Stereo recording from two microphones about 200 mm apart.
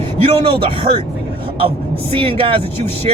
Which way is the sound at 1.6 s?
25° right (ahead or behind).